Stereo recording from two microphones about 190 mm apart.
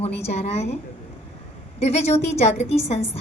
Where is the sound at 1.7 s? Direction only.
35° left (ahead or behind).